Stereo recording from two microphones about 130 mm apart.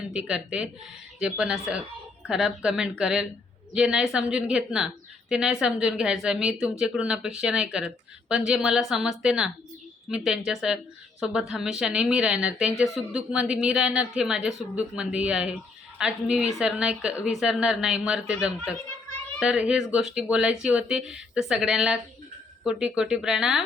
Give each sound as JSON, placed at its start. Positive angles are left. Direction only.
{"t": 0.1, "sound": "a woman's voice", "side_deg": -5}